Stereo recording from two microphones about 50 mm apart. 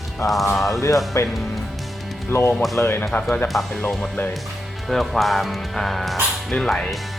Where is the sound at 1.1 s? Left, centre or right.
Left.